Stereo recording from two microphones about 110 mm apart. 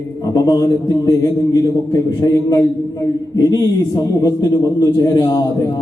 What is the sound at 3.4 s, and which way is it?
A man's voice, 30° left (ahead or behind).